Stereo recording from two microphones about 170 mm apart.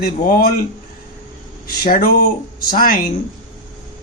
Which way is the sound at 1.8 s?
60° left (ahead or behind).